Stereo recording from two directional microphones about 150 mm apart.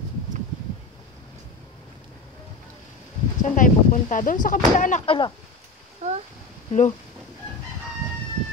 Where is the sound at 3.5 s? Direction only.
60° left (ahead or behind).